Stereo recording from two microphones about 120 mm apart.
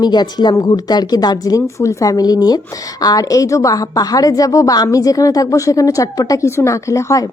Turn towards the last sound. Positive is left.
turn(degrees=25)  # may be behind; listen again after turning